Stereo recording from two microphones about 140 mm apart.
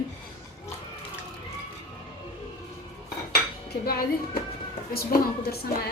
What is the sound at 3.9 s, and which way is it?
A woman's voice, 90° left.